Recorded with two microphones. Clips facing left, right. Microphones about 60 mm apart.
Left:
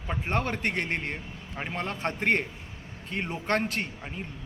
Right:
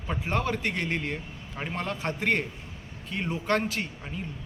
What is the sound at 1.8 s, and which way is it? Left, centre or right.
Speech, left.